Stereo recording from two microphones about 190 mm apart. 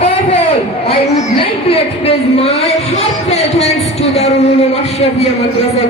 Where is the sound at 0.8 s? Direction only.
30° left (ahead or behind).